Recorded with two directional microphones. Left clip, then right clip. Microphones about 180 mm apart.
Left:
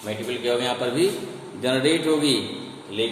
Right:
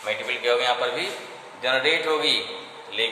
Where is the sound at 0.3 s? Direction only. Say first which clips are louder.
Right 2 dB; 20° left (ahead or behind).